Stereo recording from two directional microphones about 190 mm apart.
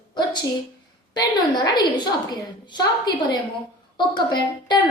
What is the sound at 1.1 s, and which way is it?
A woman's voice, 20° left (ahead or behind).